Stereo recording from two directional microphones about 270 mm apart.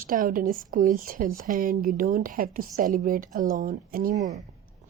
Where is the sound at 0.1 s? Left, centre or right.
Right.